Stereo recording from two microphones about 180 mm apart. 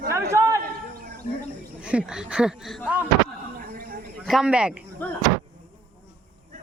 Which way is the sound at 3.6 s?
50° right (ahead or behind).